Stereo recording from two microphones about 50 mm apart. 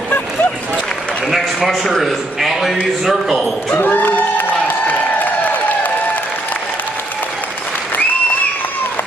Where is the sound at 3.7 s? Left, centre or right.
Left.